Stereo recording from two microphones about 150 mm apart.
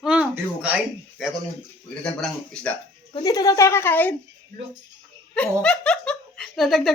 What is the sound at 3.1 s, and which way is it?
Speech, 25° left (ahead or behind).